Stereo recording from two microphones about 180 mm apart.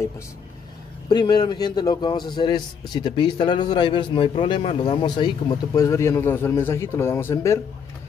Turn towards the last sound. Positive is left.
turn(degrees=15)  # may be behind; listen again after turning